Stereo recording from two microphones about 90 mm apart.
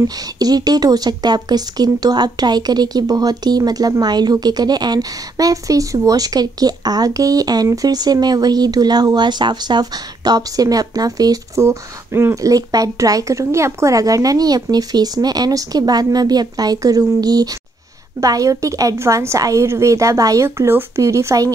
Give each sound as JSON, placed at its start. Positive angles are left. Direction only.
{"t": 0.4, "sound": "a woman's voice", "side_deg": -45}